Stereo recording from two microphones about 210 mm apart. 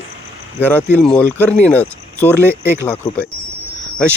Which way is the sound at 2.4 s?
10° right (ahead or behind).